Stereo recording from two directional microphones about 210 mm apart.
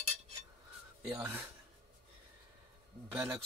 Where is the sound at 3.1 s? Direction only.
10° right (ahead or behind).